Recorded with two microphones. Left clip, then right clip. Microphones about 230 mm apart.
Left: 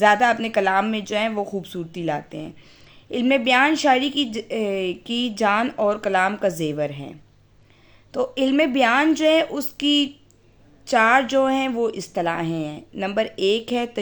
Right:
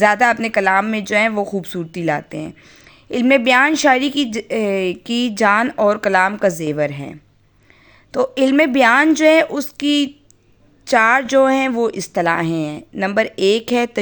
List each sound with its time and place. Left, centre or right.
0.0 s speech: right